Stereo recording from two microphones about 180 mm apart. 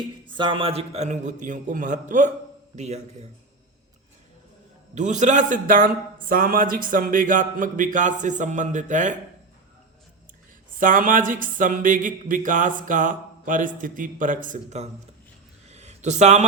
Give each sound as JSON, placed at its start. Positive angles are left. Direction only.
{"t": 0.3, "sound": "a man's voice", "side_deg": -30}
{"t": 4.9, "sound": "a man's voice", "side_deg": -40}
{"t": 10.8, "sound": "a man's voice", "side_deg": -50}
{"t": 15.7, "sound": "a sound", "side_deg": -40}